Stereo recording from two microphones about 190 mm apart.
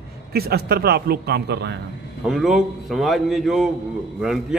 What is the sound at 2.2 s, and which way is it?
A man's voice, centre (ahead or behind).